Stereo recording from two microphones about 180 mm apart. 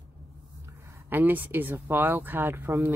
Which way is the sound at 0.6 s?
15° right (ahead or behind).